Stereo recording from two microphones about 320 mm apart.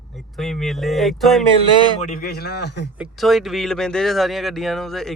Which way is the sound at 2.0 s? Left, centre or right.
Left.